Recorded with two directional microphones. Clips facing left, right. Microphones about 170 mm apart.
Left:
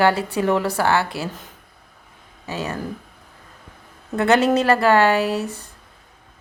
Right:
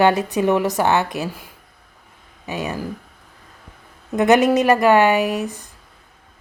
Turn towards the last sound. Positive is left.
turn(degrees=-15)  # may be behind; listen again after turning